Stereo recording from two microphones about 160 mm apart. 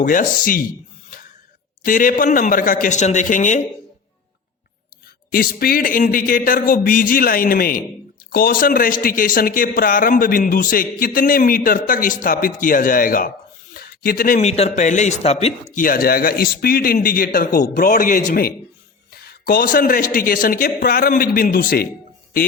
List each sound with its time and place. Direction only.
0.0 s speech: 55° left (ahead or behind)
1.8 s speech: 55° left (ahead or behind)
5.3 s speech: 65° left (ahead or behind)
13.7 s a sound: 65° left (ahead or behind)
14.3 s speech: 40° left (ahead or behind); by 18.5 s 60° left (ahead or behind)
19.1 s speech: 70° left (ahead or behind)